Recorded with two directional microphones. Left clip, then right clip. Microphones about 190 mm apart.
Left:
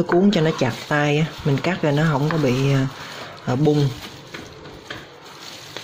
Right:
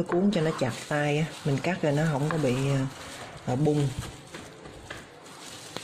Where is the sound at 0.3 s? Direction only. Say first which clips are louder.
Left 7 dB; 10° left (ahead or behind).